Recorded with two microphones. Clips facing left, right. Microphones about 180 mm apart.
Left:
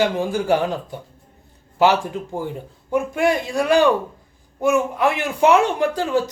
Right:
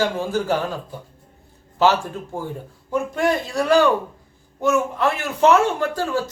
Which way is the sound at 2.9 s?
10° left (ahead or behind).